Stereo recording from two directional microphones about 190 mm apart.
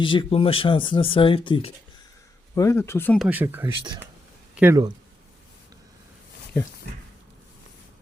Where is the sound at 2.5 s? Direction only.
15° left (ahead or behind).